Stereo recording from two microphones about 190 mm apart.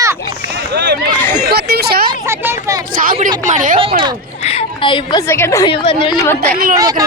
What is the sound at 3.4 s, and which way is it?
Speech, 40° right (ahead or behind).